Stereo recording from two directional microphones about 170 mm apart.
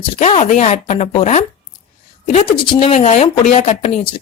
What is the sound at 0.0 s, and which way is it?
Speech, 35° left (ahead or behind).